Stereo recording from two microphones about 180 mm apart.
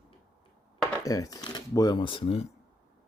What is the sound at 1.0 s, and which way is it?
Speech, 20° left (ahead or behind).